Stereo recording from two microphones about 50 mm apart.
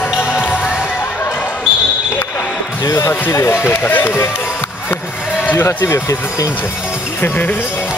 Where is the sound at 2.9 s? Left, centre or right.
Left.